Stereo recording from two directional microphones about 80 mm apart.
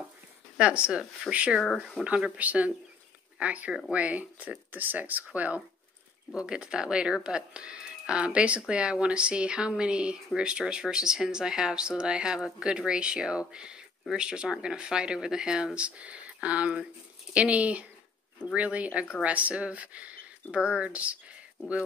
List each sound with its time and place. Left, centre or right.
0.6 s speech: centre